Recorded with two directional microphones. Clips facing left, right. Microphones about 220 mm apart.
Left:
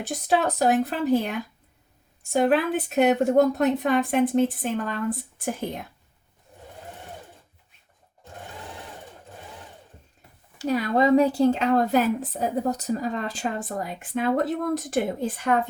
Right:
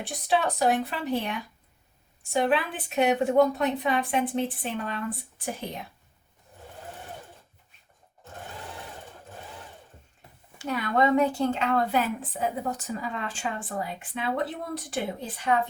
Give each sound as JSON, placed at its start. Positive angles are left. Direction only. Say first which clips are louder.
{"t": 0.0, "sound": "a woman's voice", "louder": "left 3 dB", "side_deg": 45}
{"t": 10.6, "sound": "a woman's voice", "louder": "left 4 dB", "side_deg": 35}